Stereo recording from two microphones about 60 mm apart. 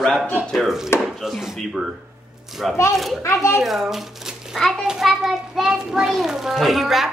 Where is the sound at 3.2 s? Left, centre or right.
Left.